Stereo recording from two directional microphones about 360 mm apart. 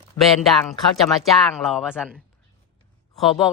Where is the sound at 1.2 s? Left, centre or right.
Centre.